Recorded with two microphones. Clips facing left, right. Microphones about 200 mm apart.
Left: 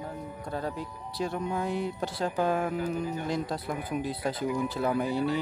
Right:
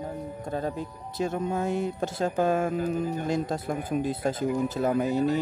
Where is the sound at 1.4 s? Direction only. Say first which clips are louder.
Right 2 dB; 45° right (ahead or behind).